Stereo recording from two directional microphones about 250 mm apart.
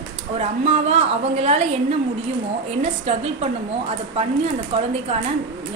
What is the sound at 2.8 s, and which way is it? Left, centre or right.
Speech, right.